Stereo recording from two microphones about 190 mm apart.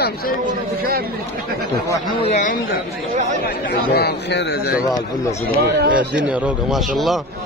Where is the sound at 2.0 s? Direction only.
45° left (ahead or behind); by 4.8 s 60° left (ahead or behind).